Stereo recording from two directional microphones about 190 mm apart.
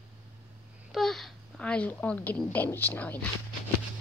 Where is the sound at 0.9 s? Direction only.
Centre (ahead or behind).